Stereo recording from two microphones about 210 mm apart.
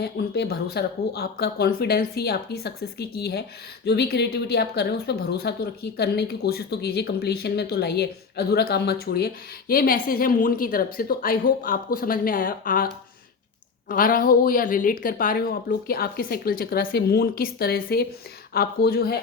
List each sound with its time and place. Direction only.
0.0 s a woman's voice: 50° left (ahead or behind)